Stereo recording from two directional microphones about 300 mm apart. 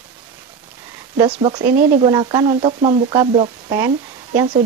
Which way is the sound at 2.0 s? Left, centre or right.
Centre.